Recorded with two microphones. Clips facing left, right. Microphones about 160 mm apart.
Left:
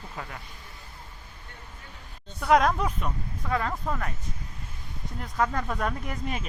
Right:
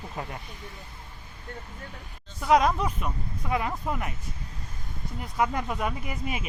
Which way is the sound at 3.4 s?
15° right (ahead or behind).